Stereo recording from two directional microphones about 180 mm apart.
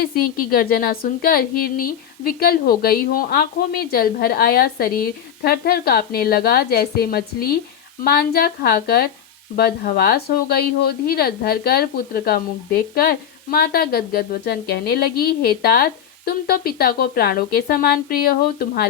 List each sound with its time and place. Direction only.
0.5 s speech: 55° left (ahead or behind)